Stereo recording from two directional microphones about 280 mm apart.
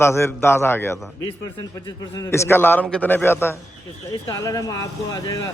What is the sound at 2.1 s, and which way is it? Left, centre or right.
A man's voice, centre.